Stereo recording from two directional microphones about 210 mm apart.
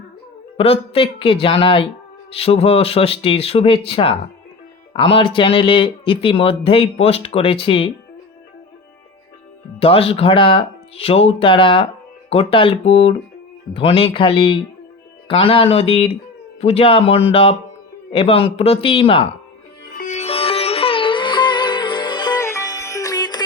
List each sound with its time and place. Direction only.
0.5 s speech: 25° left (ahead or behind)
9.8 s speech: 25° left (ahead or behind)
20.0 s sitar: 35° left (ahead or behind)